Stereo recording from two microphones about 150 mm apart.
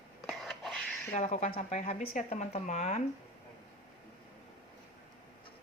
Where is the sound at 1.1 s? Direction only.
50° left (ahead or behind).